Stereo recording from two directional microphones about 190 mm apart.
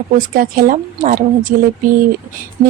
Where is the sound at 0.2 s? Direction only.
45° right (ahead or behind).